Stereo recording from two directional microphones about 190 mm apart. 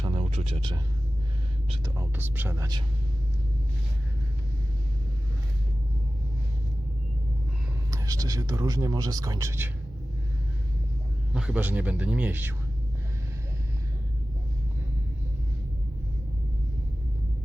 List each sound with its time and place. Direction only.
0.0 s a sound: 30° right (ahead or behind)
2.0 s speech: 10° right (ahead or behind)
7.9 s speech: 15° right (ahead or behind)
11.3 s speech: 5° right (ahead or behind)